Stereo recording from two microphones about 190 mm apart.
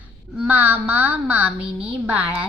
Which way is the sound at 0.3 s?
10° right (ahead or behind).